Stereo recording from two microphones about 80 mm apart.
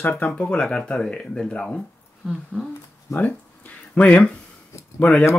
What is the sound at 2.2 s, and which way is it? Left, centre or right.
Speech, centre.